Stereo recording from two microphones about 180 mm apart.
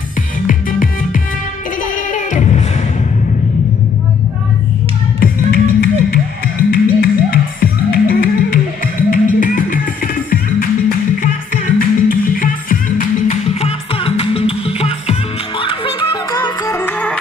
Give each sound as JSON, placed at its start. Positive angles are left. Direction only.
{"t": 0.5, "sound": "music", "side_deg": 50}
{"t": 5.2, "sound": "music", "side_deg": 55}
{"t": 11.6, "sound": "music", "side_deg": 50}
{"t": 13.6, "sound": "music", "side_deg": 35}
{"t": 16.4, "sound": "music", "side_deg": 15}